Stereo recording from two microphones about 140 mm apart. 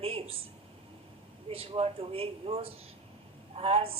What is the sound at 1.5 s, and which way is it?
A woman's voice, 45° right (ahead or behind).